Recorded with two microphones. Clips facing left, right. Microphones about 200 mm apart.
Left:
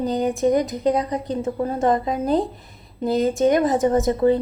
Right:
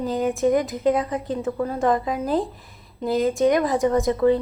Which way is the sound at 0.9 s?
40° left (ahead or behind).